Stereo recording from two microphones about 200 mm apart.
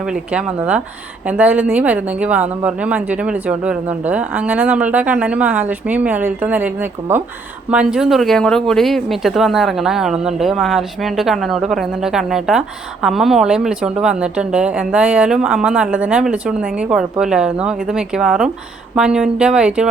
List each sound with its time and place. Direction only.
0.1 s speech: 5° right (ahead or behind)
7.7 s speech: 5° right (ahead or behind)